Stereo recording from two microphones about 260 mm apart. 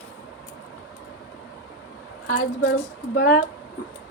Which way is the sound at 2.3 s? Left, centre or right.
Left.